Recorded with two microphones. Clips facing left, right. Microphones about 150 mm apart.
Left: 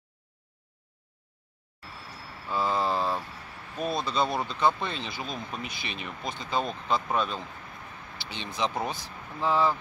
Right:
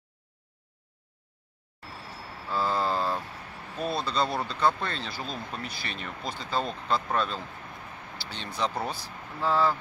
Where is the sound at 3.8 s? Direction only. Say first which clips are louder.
Left 1 dB; 15° left (ahead or behind).